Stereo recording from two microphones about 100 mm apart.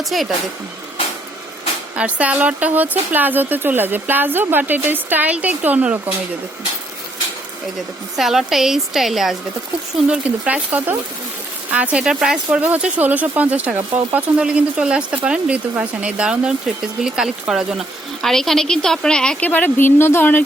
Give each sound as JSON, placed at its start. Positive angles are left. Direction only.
{"t": 0.0, "sound": "a woman's voice", "side_deg": 0}
{"t": 2.0, "sound": "speech", "side_deg": -15}
{"t": 8.1, "sound": "a woman's voice", "side_deg": -5}
{"t": 10.1, "sound": "speech", "side_deg": -15}